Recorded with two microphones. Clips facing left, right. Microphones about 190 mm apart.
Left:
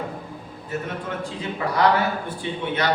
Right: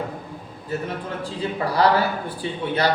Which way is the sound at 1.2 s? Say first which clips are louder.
Right 5 dB; 35° right (ahead or behind).